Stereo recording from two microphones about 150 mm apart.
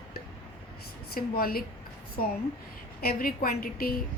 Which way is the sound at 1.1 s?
80° left.